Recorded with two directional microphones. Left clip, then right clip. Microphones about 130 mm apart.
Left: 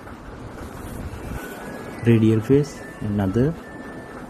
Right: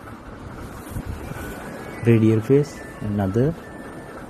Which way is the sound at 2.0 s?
Centre (ahead or behind).